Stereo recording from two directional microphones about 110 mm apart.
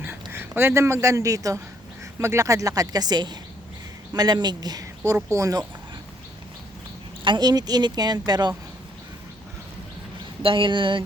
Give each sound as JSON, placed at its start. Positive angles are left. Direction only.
{"t": 0.0, "sound": "speech", "side_deg": -20}
{"t": 7.3, "sound": "speech", "side_deg": -40}
{"t": 10.4, "sound": "speech", "side_deg": -50}